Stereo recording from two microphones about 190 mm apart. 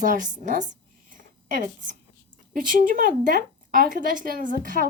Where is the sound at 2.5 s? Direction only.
45° right (ahead or behind).